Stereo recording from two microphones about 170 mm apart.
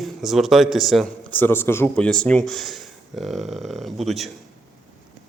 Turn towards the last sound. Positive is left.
turn(degrees=0)  # may be behind; listen again after turning